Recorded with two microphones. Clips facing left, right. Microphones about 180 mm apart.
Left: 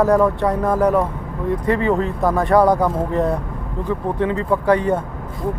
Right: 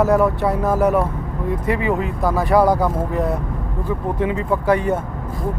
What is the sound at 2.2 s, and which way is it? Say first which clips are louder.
Speech: left 1 dB; 5° right (ahead or behind).